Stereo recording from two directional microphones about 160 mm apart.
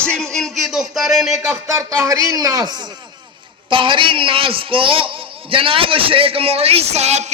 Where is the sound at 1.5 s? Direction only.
15° right (ahead or behind).